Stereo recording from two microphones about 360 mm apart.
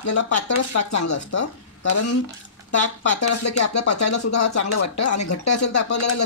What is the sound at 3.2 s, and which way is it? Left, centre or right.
Speech, left.